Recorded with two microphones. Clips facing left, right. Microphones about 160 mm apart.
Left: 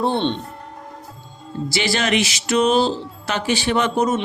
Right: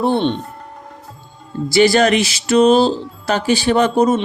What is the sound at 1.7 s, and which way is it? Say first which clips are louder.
Speech: right 9 dB; 45° right (ahead or behind).